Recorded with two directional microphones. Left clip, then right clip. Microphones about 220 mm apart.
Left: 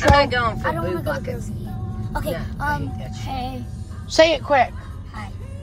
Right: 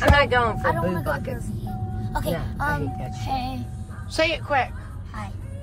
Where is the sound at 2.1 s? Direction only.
Centre (ahead or behind).